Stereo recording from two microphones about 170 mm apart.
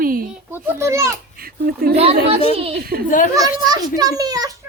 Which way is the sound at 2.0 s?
35° right (ahead or behind).